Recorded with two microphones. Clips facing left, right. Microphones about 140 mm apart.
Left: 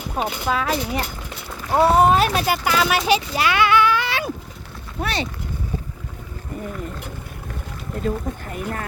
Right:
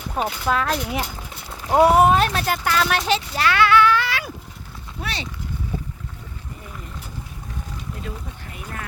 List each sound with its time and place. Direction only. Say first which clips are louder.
0.4 s speech: even; centre (ahead or behind)
1.6 s speech: right 1 dB; 15° right (ahead or behind)
2.0 s speech: left 1 dB; 5° left (ahead or behind); by 4.3 s 20° left (ahead or behind)
4.9 s speech: left 6 dB; 55° left (ahead or behind)
8.0 s speech: left 10 dB; 45° left (ahead or behind)